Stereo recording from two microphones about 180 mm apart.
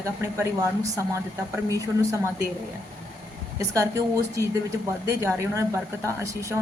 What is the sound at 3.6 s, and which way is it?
Speech, 15° right (ahead or behind).